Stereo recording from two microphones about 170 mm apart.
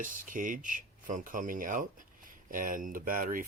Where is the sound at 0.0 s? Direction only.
50° right (ahead or behind).